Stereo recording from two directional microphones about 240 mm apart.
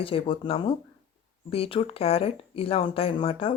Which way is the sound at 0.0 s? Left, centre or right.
Left.